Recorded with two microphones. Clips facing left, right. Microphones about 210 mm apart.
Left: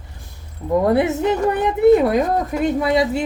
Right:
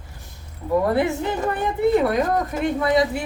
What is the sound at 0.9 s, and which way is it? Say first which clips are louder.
Speech: left 4 dB; 20° left (ahead or behind).